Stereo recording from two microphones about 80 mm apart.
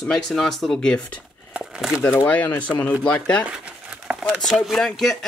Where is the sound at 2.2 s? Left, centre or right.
Centre.